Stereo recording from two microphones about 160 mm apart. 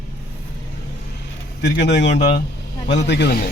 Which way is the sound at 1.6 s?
90° left.